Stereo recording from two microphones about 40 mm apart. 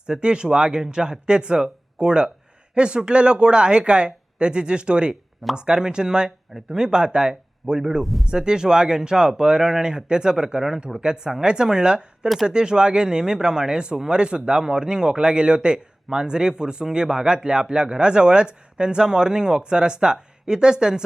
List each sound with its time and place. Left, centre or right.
0.0 s speech: right